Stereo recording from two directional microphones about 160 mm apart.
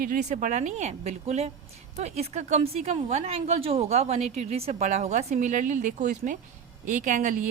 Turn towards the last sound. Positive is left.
turn(degrees=-55)  # may be behind; listen again after turning